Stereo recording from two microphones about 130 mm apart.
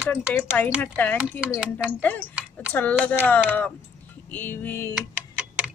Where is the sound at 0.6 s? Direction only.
10° left (ahead or behind).